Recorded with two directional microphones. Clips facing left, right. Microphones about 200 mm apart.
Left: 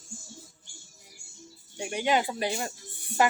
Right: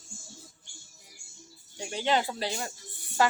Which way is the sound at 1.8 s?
15° left (ahead or behind).